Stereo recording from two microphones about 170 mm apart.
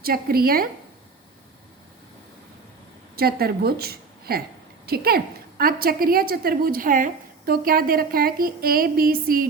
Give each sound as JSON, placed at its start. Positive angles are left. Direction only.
{"t": 0.0, "sound": "a woman's voice", "side_deg": -60}
{"t": 3.2, "sound": "a woman's voice", "side_deg": -65}